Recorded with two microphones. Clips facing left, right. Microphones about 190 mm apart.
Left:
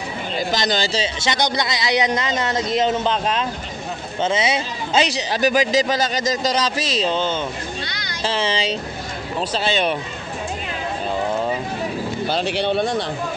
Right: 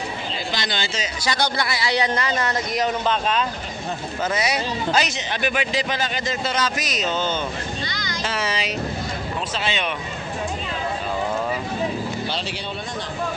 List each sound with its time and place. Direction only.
0.5 s a man's voice: 40° left (ahead or behind)
1.2 s a man's voice: 20° left (ahead or behind)
7.8 s a sound: 65° left (ahead or behind)
8.2 s a man's voice: 30° left (ahead or behind)
12.3 s speech: 50° left (ahead or behind)
12.5 s speech: 70° left (ahead or behind)